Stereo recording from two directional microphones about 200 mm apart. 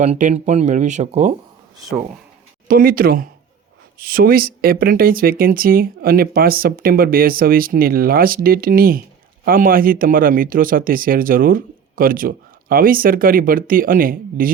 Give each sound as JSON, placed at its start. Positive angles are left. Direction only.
{"t": 0.0, "sound": "speech", "side_deg": -35}
{"t": 2.6, "sound": "speech", "side_deg": -45}